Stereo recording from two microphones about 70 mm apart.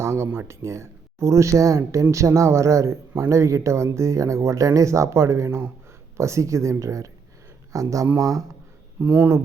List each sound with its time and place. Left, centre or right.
0.0 s a sound: right
0.3 s speech: right
9.0 s speech: right